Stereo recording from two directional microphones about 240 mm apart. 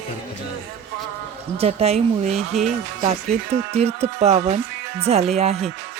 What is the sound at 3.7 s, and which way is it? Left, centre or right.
Speech, right.